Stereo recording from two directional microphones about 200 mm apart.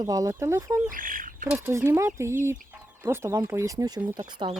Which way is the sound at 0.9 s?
45° right (ahead or behind).